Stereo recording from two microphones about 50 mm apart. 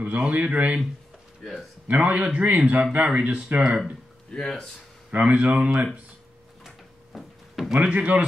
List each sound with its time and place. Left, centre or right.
0.0 s speech: right
1.4 s speech: centre
1.9 s speech: right; by 3.9 s centre
4.4 s speech: centre
5.1 s speech: right
7.2 s a sound: centre
7.8 s speech: right